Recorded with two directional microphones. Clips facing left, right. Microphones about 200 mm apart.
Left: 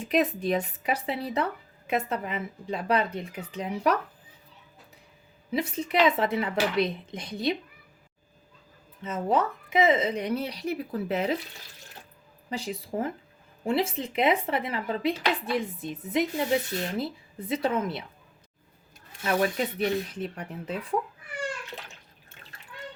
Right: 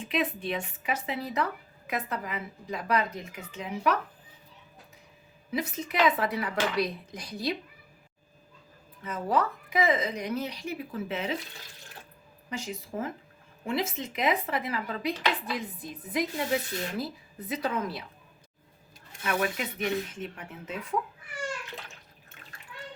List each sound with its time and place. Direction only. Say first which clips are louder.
0.0 s a woman's voice: left 5 dB; 40° left (ahead or behind)
5.5 s a woman's voice: left 3 dB; 30° left (ahead or behind)
9.0 s speech: left 2 dB; 20° left (ahead or behind); by 11.3 s 40° left (ahead or behind)
12.5 s a woman's voice: left 3 dB; 35° left (ahead or behind)
19.2 s speech: left 4 dB; 35° left (ahead or behind)